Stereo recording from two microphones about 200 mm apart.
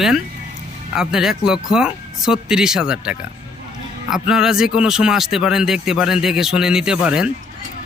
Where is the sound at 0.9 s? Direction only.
5° right (ahead or behind).